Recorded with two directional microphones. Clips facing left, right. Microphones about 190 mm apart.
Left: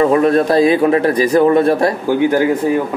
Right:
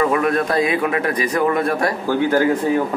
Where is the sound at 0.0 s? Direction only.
30° left (ahead or behind).